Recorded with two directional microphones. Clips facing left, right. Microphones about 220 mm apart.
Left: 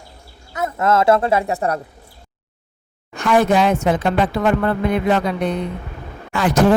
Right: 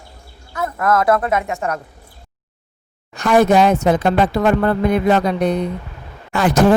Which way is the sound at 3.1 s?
40° right (ahead or behind).